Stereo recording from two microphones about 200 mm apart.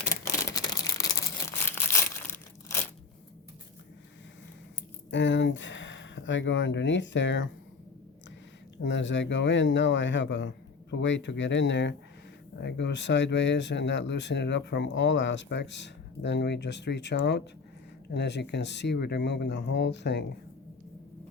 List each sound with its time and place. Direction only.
0.5 s crumpling: 20° left (ahead or behind)
5.1 s speech: 65° left (ahead or behind)
8.8 s speech: 65° left (ahead or behind)